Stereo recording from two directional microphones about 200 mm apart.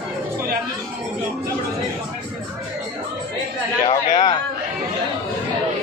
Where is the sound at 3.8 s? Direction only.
20° left (ahead or behind).